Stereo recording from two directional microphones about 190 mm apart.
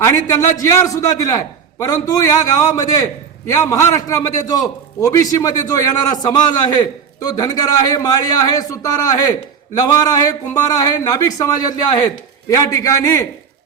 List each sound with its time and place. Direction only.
0.0 s a man's voice: 15° left (ahead or behind)